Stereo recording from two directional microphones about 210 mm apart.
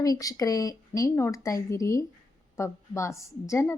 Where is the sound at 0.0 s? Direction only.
15° left (ahead or behind).